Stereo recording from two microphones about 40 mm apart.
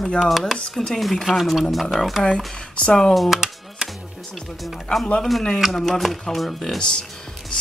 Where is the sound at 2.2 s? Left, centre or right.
Left.